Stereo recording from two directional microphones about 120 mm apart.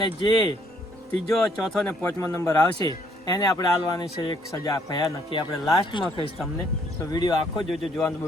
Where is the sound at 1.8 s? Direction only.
20° left (ahead or behind).